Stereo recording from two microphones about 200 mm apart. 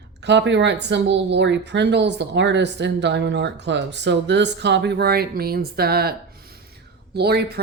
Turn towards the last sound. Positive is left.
turn(degrees=-55)  # may be behind; listen again after turning